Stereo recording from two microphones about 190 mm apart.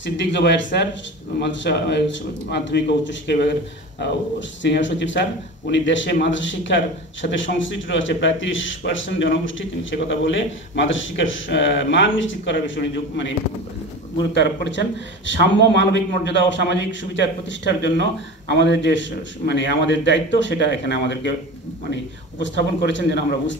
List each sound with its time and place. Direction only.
0.0 s a man's voice: 70° left (ahead or behind)
14.3 s a man's voice: 70° left (ahead or behind)
22.4 s a man's voice: 75° left (ahead or behind)